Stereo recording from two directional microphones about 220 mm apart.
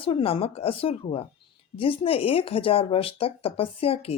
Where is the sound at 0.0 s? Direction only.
25° left (ahead or behind).